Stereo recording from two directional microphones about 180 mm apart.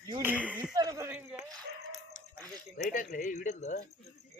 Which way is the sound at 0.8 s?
20° right (ahead or behind).